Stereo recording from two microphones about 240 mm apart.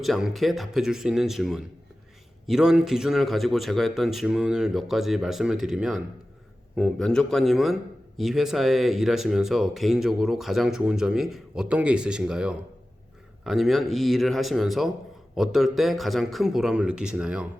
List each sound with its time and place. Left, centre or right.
0.0 s speech: centre